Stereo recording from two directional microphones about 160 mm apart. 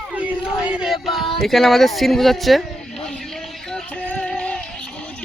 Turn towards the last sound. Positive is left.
turn(degrees=5)  # may be behind; listen again after turning